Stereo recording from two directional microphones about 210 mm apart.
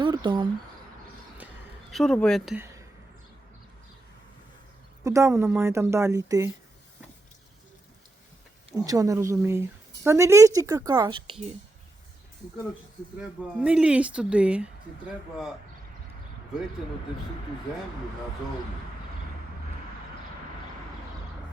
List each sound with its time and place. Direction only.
0.0 s a sound: 25° right (ahead or behind)
1.9 s speech: centre (ahead or behind)
5.0 s a woman's voice: 15° right (ahead or behind)
8.8 s a woman's voice: 15° right (ahead or behind)
13.6 s speech: 5° right (ahead or behind)